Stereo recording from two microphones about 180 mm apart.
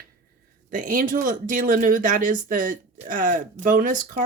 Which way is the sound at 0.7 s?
50° right (ahead or behind).